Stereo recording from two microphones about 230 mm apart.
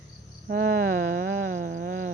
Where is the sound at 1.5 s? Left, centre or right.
Right.